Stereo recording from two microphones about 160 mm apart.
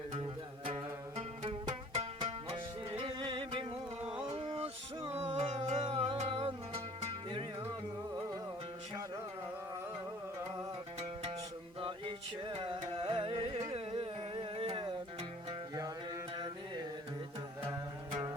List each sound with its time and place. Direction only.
0.2 s music: 35° right (ahead or behind)
4.0 s music: 5° right (ahead or behind)
4.4 s music: 35° right (ahead or behind)
11.0 s music: 35° right (ahead or behind)